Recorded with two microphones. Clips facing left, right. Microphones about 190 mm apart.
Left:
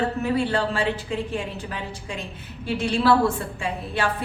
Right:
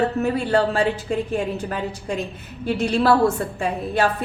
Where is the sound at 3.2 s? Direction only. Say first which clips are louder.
Right 4 dB; 45° right (ahead or behind).